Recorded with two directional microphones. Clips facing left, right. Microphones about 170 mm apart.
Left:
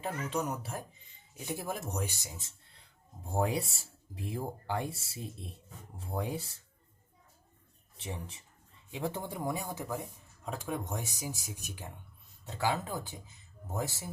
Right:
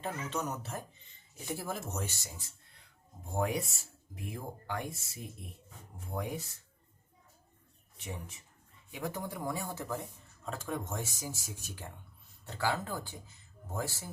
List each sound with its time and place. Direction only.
0.0 s speech: 10° left (ahead or behind)
3.2 s speech: 30° left (ahead or behind)
7.9 s speech: 30° left (ahead or behind)